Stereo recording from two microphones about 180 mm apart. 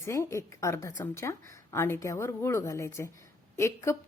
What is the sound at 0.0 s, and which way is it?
A woman's voice, 15° left (ahead or behind).